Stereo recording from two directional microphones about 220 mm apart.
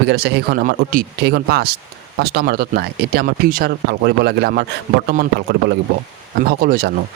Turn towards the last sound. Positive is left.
turn(degrees=-45)  # may be behind; listen again after turning